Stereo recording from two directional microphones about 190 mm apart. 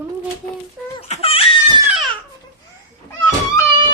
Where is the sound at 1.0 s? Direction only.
30° left (ahead or behind).